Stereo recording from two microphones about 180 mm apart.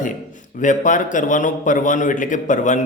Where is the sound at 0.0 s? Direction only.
45° left (ahead or behind).